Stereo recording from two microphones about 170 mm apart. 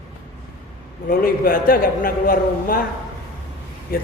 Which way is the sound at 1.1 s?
55° left (ahead or behind).